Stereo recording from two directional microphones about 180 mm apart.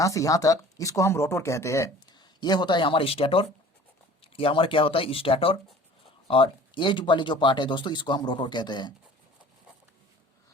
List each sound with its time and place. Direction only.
0.0 s speech: 20° left (ahead or behind)